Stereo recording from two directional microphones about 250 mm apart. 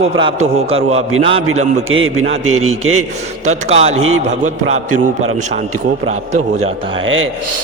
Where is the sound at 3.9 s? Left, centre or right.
Right.